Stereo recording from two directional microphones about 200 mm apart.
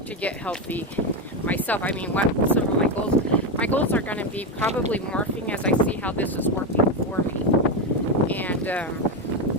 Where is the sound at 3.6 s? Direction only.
10° left (ahead or behind).